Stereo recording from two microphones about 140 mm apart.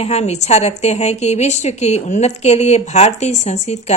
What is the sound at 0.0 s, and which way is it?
A woman's voice, 50° left (ahead or behind).